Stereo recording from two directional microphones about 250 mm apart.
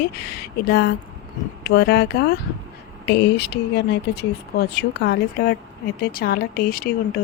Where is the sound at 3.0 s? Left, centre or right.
Left.